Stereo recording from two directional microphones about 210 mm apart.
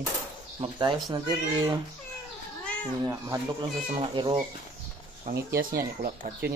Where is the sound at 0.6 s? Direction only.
20° right (ahead or behind).